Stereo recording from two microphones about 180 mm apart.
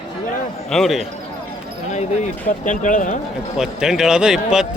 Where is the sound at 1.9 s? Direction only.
40° left (ahead or behind).